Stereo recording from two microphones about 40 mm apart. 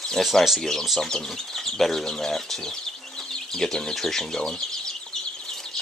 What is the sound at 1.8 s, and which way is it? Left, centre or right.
Speech, centre.